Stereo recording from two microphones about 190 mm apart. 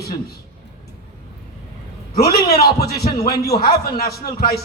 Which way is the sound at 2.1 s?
55° left (ahead or behind).